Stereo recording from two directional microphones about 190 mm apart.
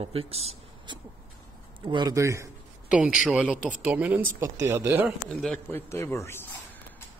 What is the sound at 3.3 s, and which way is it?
A man's voice, 5° right (ahead or behind).